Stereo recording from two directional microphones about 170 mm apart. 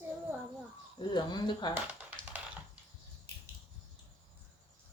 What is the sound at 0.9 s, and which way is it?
Speech, 25° left (ahead or behind).